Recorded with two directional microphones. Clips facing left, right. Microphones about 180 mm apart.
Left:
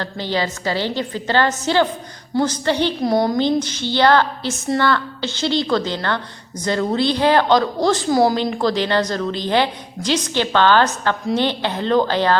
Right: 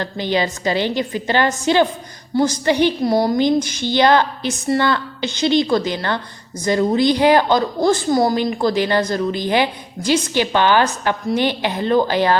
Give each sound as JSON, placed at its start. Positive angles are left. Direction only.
{"t": 0.0, "sound": "a woman's voice", "side_deg": -15}